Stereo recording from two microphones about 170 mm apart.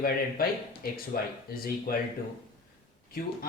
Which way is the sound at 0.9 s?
60° left (ahead or behind).